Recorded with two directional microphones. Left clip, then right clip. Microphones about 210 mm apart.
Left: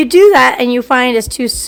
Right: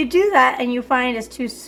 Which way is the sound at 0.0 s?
55° left (ahead or behind).